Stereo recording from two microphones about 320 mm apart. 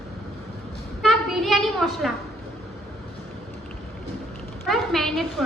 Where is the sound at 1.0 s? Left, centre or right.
Centre.